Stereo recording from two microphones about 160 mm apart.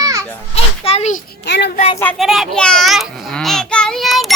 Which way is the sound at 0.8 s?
40° left (ahead or behind).